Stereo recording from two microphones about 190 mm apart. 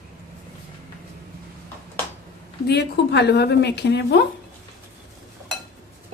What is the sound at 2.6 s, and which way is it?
Speech, 60° left (ahead or behind).